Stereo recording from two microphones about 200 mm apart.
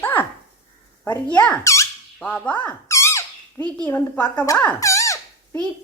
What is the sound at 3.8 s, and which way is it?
Speech, 10° left (ahead or behind).